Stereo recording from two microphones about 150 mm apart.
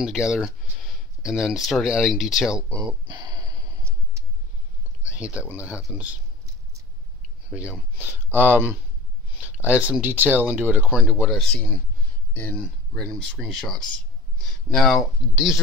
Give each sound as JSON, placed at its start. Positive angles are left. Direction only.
{"t": 0.0, "sound": "speech", "side_deg": -5}
{"t": 3.1, "sound": "a sound", "side_deg": -25}
{"t": 5.1, "sound": "speech", "side_deg": -5}
{"t": 8.0, "sound": "speech", "side_deg": -15}